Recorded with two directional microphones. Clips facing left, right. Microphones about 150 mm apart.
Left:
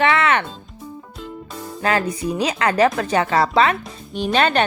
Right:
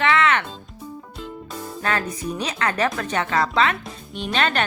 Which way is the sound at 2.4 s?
30° left (ahead or behind).